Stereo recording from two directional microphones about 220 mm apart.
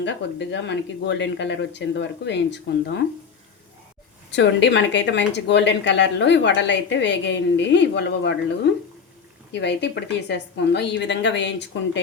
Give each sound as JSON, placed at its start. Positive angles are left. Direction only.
{"t": 0.0, "sound": "speech", "side_deg": 55}
{"t": 4.3, "sound": "speech", "side_deg": 55}